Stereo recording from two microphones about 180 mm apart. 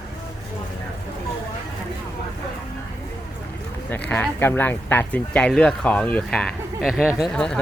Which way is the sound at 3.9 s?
10° left (ahead or behind).